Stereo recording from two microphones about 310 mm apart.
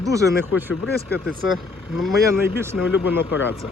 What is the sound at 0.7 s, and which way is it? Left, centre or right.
Speech, left.